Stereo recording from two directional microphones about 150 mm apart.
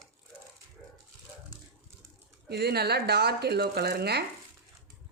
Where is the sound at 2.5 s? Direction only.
90° right.